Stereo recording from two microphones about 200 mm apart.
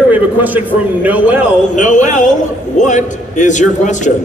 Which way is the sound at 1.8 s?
40° left (ahead or behind).